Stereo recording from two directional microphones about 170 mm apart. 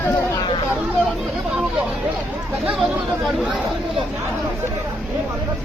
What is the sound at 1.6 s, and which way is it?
Speech, 10° right (ahead or behind).